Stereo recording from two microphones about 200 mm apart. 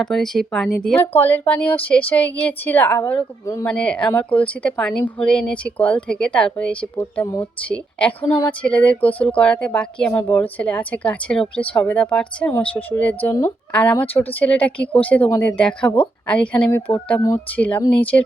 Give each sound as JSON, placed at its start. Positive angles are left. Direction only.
{"t": 0.0, "sound": "speech", "side_deg": 0}